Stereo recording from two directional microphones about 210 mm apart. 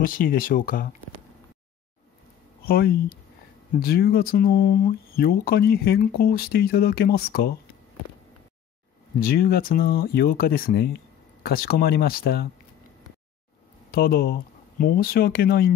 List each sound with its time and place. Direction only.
0.0 s speech: 40° left (ahead or behind)
2.6 s speech: 45° left (ahead or behind)
9.2 s speech: 45° left (ahead or behind)
13.9 s speech: 45° left (ahead or behind)